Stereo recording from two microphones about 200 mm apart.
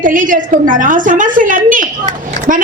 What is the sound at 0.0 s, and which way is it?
A woman's voice, 40° right (ahead or behind).